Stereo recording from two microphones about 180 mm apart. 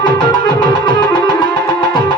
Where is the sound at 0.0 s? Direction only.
25° left (ahead or behind).